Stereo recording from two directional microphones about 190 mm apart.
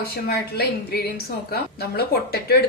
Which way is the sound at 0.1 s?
55° left (ahead or behind).